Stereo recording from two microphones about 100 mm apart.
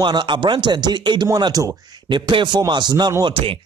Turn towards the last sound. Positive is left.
turn(degrees=-65)  # may be behind; listen again after turning